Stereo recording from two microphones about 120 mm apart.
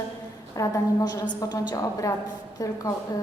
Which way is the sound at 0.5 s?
30° left (ahead or behind).